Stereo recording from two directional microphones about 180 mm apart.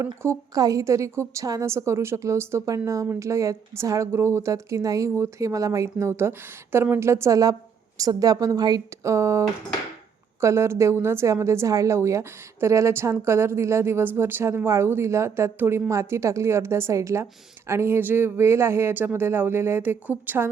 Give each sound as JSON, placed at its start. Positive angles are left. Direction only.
{"t": 0.2, "sound": "a woman's voice", "side_deg": -15}
{"t": 10.4, "sound": "a woman's voice", "side_deg": -15}